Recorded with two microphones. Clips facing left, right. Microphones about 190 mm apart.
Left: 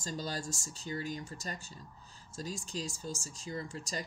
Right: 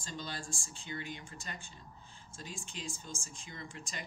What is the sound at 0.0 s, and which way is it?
Speech, 40° left (ahead or behind).